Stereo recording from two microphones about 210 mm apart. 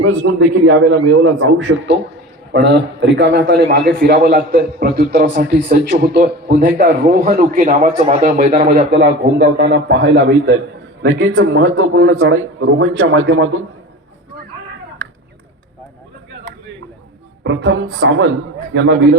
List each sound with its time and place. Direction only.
0.0 s a man's voice: 65° right (ahead or behind); by 5.2 s 40° right (ahead or behind)
5.3 s a man's voice: 55° right (ahead or behind); by 8.7 s 30° right (ahead or behind)
8.9 s a man's voice: 55° right (ahead or behind)
12.2 s speech: 70° right (ahead or behind)
17.4 s a man's voice: 60° right (ahead or behind)